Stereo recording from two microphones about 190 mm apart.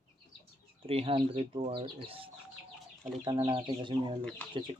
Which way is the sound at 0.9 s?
30° right (ahead or behind).